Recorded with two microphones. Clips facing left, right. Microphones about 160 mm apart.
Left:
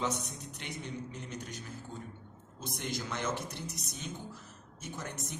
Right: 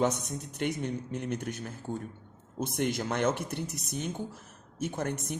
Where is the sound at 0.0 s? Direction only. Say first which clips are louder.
Right 7 dB; 55° right (ahead or behind).